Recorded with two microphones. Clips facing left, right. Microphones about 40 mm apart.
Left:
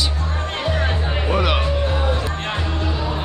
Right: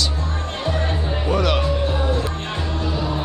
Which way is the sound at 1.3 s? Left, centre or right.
Centre.